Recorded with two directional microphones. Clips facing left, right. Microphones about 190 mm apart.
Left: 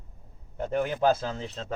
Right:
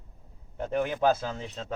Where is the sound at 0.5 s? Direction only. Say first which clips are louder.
Left 1 dB; centre (ahead or behind).